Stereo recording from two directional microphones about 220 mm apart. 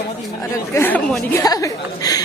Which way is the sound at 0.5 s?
10° left (ahead or behind).